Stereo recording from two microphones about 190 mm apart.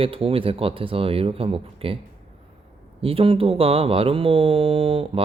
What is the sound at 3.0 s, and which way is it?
Speech, 30° right (ahead or behind).